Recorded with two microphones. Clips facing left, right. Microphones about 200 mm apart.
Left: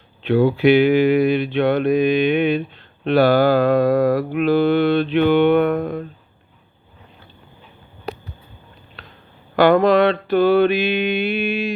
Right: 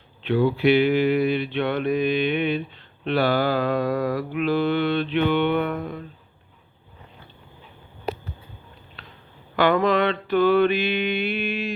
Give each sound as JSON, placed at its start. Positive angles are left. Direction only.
{"t": 0.4, "sound": "mantra", "side_deg": 50}
{"t": 9.6, "sound": "mantra", "side_deg": 40}